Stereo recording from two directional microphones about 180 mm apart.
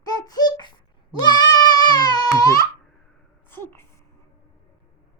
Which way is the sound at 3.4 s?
10° left (ahead or behind).